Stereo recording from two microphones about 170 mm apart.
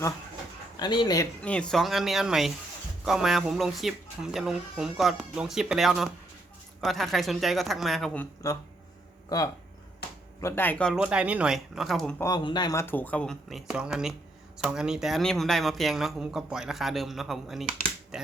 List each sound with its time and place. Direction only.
0.8 s speech: 25° left (ahead or behind)
1.4 s speech: 5° left (ahead or behind)
10.4 s speech: 10° left (ahead or behind)
10.9 s speech: 5° right (ahead or behind)
12.2 s speech: 25° left (ahead or behind)
12.8 s speech: 10° left (ahead or behind)